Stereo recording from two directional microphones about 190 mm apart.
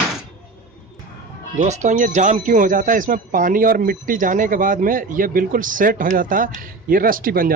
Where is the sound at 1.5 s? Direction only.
40° right (ahead or behind).